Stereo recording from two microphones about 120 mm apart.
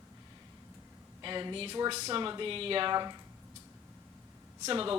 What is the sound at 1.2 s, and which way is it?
Speech, 40° right (ahead or behind).